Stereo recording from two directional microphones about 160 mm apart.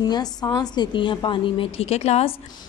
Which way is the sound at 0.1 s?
25° left (ahead or behind).